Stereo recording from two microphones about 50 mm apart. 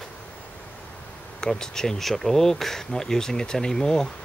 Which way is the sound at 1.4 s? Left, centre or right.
Centre.